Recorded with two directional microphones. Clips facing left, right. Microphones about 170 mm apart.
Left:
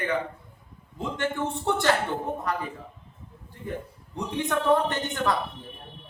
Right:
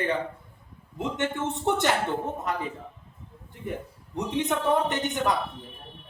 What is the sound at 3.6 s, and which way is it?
A man's voice, 20° right (ahead or behind).